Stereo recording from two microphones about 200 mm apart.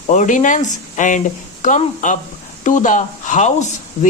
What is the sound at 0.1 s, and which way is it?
Speech, 40° left (ahead or behind).